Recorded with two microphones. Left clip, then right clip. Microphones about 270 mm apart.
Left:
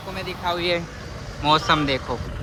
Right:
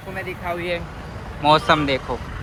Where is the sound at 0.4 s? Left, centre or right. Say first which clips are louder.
Left 3 dB; left.